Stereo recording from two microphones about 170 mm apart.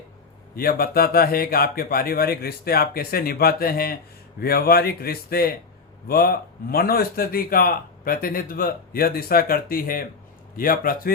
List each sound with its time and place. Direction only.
0.5 s speech: 60° left (ahead or behind)